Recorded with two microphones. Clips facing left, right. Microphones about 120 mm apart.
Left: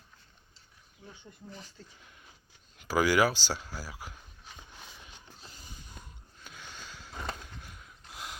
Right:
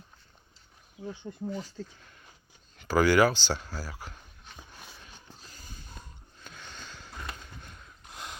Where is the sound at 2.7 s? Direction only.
5° left (ahead or behind).